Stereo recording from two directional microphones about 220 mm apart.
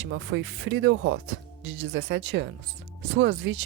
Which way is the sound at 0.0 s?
60° right (ahead or behind).